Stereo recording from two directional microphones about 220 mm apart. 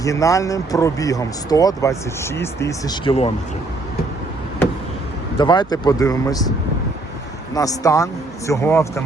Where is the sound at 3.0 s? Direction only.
25° left (ahead or behind).